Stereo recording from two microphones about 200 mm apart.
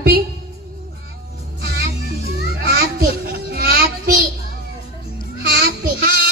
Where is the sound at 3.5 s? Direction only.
50° right (ahead or behind).